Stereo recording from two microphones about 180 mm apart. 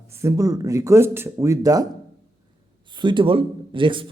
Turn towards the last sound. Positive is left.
turn(degrees=-30)  # may be behind; listen again after turning